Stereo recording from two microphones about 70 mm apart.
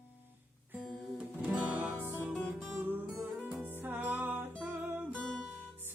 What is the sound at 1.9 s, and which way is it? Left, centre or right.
Music, right.